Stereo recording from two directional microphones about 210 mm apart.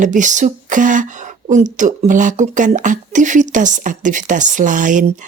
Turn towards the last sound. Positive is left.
turn(degrees=-35)  # may be behind; listen again after turning